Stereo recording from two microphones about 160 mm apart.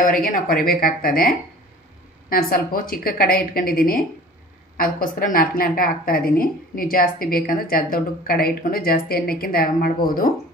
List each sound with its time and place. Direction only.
0.1 s a woman's voice: 65° left (ahead or behind)